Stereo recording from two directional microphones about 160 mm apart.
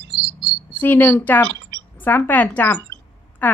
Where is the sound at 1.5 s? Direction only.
90° right.